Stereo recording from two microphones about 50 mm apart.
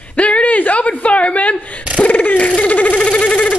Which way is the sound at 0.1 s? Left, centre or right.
Left.